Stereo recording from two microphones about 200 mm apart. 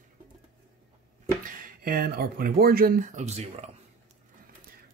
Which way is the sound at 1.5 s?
45° right (ahead or behind).